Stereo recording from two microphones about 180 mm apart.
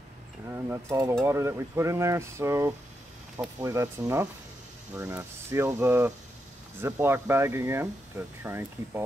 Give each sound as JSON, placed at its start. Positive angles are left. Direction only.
{"t": 0.5, "sound": "stir", "side_deg": -15}